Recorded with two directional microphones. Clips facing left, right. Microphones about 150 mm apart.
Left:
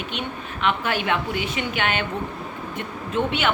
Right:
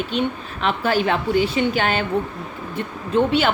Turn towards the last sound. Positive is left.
turn(degrees=-35)  # may be behind; listen again after turning